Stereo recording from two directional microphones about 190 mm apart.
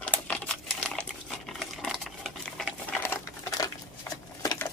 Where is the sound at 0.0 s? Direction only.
5° left (ahead or behind).